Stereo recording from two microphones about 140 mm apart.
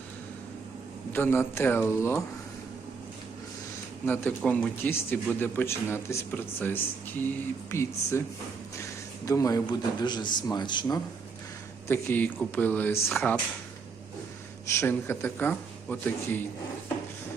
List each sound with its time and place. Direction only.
1.1 s speech: 15° left (ahead or behind)
4.0 s a man's voice: 10° left (ahead or behind); by 11.0 s 30° left (ahead or behind)
11.9 s speech: 15° left (ahead or behind)
14.7 s speech: 20° left (ahead or behind)